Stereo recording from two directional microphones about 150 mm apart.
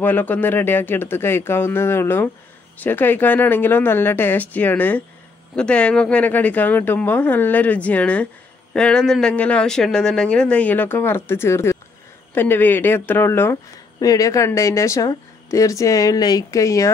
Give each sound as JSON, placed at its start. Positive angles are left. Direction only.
{"t": 0.0, "sound": "speech", "side_deg": 10}